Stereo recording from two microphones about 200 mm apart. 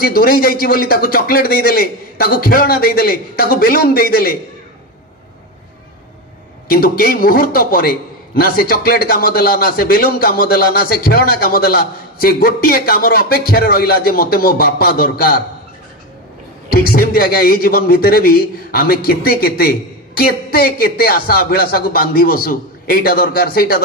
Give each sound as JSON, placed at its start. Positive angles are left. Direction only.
{"t": 0.0, "sound": "a man's voice", "side_deg": 50}
{"t": 6.7, "sound": "a man's voice", "side_deg": 50}
{"t": 16.7, "sound": "a man's voice", "side_deg": 50}